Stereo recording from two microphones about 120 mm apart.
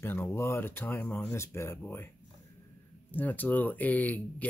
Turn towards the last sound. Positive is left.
turn(degrees=15)  # may be behind; listen again after turning